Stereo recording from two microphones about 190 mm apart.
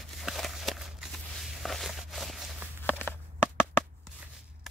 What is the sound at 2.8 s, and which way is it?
Walk, 10° left (ahead or behind).